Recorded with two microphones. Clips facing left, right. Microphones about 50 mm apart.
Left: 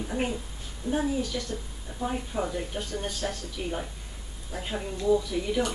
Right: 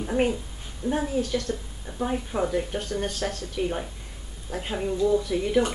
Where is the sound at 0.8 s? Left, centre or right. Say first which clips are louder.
Right 2 dB; centre.